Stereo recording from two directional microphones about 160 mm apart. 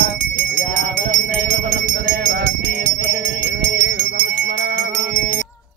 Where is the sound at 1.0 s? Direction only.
50° right (ahead or behind).